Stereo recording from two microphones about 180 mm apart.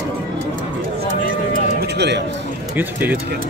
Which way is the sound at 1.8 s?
70° right (ahead or behind).